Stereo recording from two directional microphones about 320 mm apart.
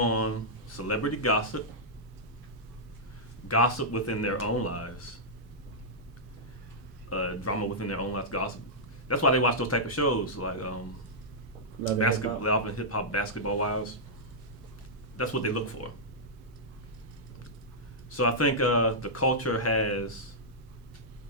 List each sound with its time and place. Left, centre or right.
0.0 s speech: left
3.5 s speech: left
7.1 s speech: left
11.9 s speech: left
15.2 s speech: left
18.2 s speech: left